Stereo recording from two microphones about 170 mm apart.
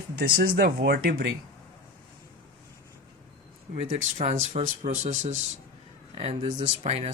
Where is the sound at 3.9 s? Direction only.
40° right (ahead or behind).